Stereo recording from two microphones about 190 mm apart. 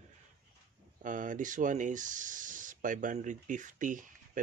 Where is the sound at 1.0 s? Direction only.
45° right (ahead or behind).